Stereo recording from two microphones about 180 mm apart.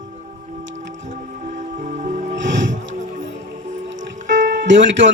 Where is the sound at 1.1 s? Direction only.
45° right (ahead or behind).